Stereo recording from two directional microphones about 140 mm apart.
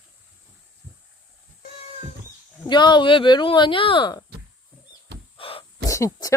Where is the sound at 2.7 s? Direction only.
30° left (ahead or behind).